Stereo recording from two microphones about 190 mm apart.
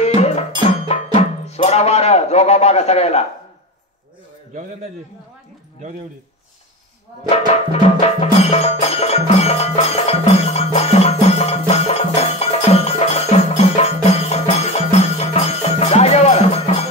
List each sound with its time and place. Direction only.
0.0 s music: 35° left (ahead or behind)
7.2 s music: 35° left (ahead or behind)